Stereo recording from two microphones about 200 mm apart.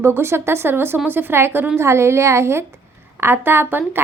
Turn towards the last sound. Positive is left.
turn(degrees=-10)  # may be behind; listen again after turning